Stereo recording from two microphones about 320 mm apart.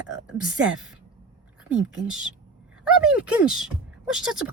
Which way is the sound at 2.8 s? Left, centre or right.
Centre.